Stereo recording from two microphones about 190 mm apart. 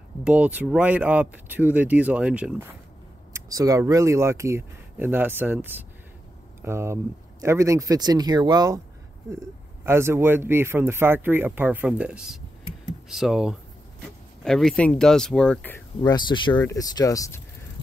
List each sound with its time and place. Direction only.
0.2 s speech: 5° right (ahead or behind)
3.3 s speech: 20° right (ahead or behind)
9.8 s speech: 15° right (ahead or behind); by 15.8 s 5° left (ahead or behind)
16.0 s speech: 20° left (ahead or behind)